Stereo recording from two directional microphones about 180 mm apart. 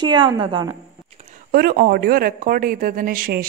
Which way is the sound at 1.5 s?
55° right (ahead or behind).